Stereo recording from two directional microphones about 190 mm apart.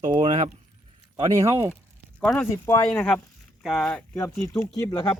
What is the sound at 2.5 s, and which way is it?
Speech, 15° left (ahead or behind).